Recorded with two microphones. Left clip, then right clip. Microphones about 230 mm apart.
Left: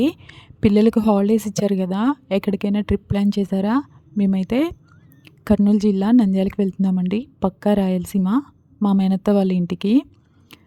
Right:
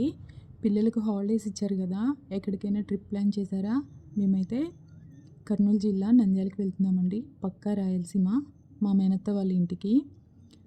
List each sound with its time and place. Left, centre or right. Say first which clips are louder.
0.0 s a woman's voice: left 10 dB; left